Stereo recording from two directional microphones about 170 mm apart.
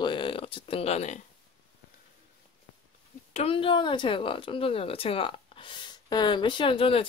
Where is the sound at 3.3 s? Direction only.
35° left (ahead or behind).